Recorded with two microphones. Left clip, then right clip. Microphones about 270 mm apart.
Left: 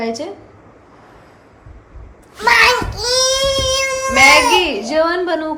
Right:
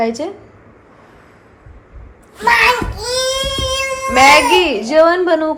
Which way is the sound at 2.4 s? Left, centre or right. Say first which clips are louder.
Even; centre.